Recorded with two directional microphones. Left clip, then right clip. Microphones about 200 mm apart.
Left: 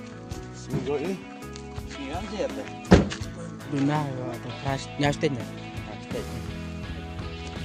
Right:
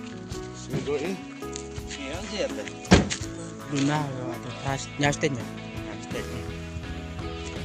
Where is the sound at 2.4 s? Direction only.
45° left (ahead or behind).